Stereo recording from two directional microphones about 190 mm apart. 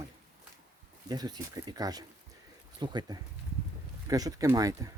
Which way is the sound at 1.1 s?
20° right (ahead or behind).